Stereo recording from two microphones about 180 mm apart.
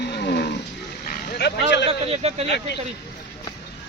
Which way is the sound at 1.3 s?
65° left (ahead or behind).